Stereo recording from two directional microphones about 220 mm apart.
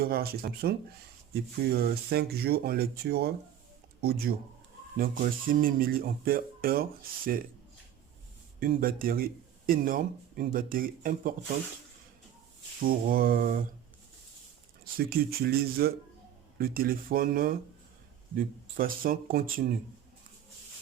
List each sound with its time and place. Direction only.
0.0 s speech: 45° right (ahead or behind)
8.6 s speech: 40° right (ahead or behind)
12.8 s speech: 40° right (ahead or behind)
14.9 s speech: 45° right (ahead or behind)